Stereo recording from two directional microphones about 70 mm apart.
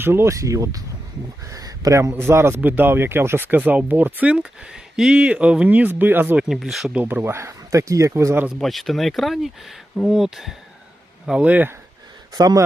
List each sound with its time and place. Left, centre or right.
0.0 s speech: right
0.3 s a man's voice: right
2.6 s speech: right
4.3 s speech: centre; by 6.3 s right
6.5 s speech: centre
6.9 s speech: right
8.6 s speech: centre
11.3 s speech: centre
12.3 s speech: right